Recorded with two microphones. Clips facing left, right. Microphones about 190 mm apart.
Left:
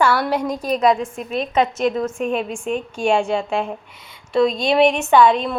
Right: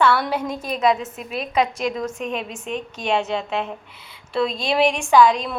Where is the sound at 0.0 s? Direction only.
10° left (ahead or behind).